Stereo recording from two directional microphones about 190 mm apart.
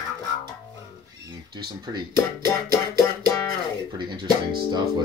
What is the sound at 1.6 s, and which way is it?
Speech, 20° right (ahead or behind).